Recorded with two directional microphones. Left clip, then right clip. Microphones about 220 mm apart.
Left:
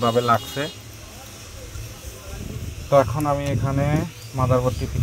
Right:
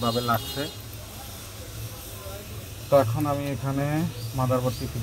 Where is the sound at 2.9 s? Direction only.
30° left (ahead or behind).